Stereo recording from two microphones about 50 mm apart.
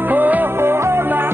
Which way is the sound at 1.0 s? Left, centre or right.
Right.